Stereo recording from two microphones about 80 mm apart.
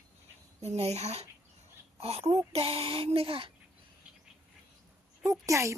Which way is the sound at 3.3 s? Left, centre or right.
Right.